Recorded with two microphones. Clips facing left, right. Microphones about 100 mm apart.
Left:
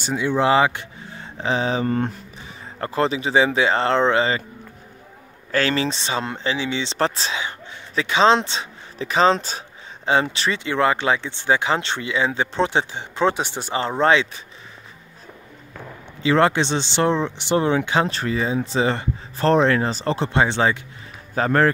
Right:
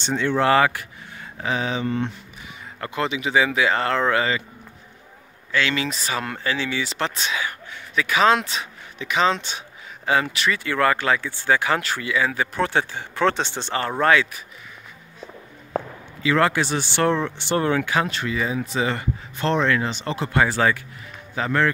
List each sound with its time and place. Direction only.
0.0 s speech: 10° left (ahead or behind); by 4.4 s 25° left (ahead or behind)
5.5 s speech: 40° left (ahead or behind); by 14.4 s 25° left (ahead or behind)
16.2 s speech: 30° left (ahead or behind)
21.4 s a man's voice: 40° left (ahead or behind)